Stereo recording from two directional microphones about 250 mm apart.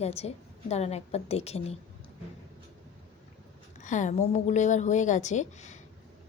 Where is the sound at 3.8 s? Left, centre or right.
Left.